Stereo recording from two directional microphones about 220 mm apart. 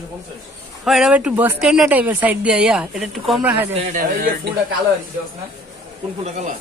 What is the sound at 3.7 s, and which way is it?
Speech, 30° right (ahead or behind).